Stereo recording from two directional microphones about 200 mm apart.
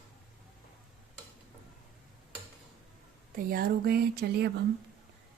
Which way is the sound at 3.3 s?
50° right (ahead or behind).